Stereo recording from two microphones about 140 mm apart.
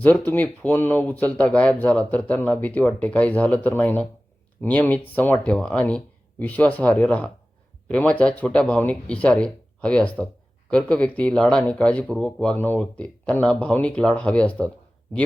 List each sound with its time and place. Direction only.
0.3 s speech: 15° left (ahead or behind)